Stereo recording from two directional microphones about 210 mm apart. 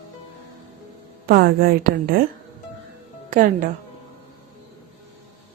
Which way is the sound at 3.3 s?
40° right (ahead or behind).